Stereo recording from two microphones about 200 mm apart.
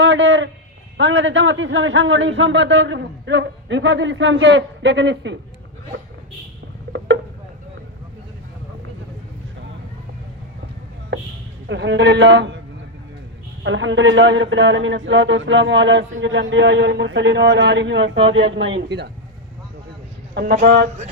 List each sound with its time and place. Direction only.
0.0 s a sound: 65° right (ahead or behind)
0.9 s a man's voice: 65° right (ahead or behind)
6.9 s a sound: 55° right (ahead or behind)
11.7 s a man's voice: 60° right (ahead or behind)
13.7 s a man's voice: 70° right (ahead or behind)
20.3 s a man's voice: 55° right (ahead or behind)